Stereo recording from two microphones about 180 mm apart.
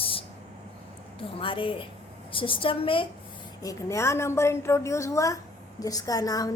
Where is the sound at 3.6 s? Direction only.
20° left (ahead or behind).